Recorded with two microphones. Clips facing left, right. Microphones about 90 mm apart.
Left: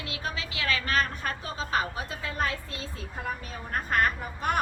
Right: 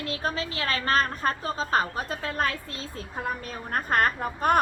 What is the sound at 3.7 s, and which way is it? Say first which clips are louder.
Speech: right 2 dB; 45° right (ahead or behind).